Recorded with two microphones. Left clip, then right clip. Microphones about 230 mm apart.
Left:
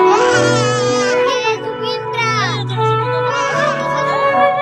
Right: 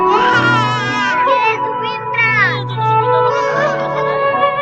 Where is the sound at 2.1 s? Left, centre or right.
Left.